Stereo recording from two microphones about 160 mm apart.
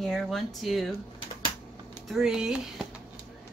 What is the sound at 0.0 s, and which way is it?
Speech, centre (ahead or behind).